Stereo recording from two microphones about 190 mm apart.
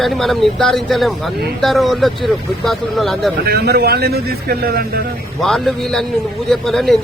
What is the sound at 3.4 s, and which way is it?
A man's voice, 55° right (ahead or behind).